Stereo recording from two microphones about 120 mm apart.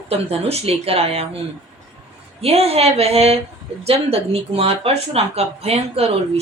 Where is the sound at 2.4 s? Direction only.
55° right (ahead or behind).